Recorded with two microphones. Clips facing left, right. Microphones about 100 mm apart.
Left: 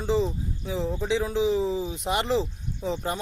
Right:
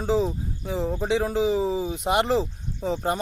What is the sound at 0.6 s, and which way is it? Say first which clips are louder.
Speech: right 2 dB; 50° right (ahead or behind).